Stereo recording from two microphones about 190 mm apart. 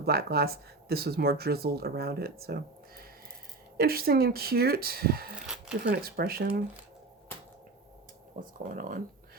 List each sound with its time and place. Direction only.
0.0 s speech: 55° right (ahead or behind)
8.4 s speech: 45° right (ahead or behind)